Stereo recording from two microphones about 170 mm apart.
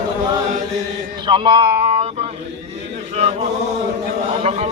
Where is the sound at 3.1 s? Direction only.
35° right (ahead or behind).